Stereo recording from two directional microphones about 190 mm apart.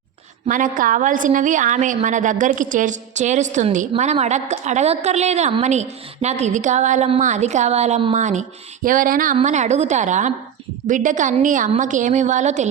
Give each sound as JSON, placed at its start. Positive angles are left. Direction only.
{"t": 0.4, "sound": "a woman's voice", "side_deg": -45}